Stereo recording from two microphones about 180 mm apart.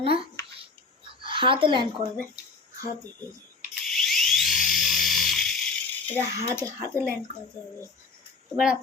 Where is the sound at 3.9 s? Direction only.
Centre (ahead or behind).